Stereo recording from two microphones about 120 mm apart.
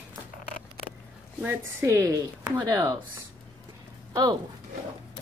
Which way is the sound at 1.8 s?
25° right (ahead or behind).